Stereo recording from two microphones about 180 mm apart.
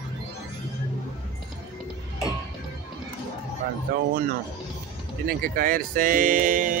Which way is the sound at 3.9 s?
55° right (ahead or behind).